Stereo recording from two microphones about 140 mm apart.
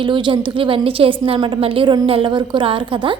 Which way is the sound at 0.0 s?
35° right (ahead or behind).